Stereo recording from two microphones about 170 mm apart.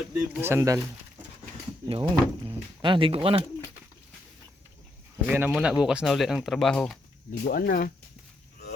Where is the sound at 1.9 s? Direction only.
30° right (ahead or behind).